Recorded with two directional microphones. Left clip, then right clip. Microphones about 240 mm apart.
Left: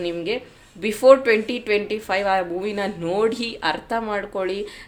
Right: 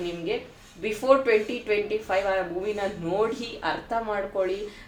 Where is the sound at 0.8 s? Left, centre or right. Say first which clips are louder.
Left 7 dB; left.